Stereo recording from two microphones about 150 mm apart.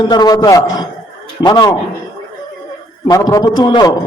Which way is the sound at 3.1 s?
25° left (ahead or behind).